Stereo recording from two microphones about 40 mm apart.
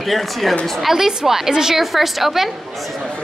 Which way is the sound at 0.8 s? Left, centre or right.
Centre.